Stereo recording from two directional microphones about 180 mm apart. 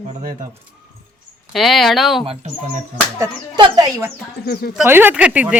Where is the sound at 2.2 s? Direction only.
30° right (ahead or behind).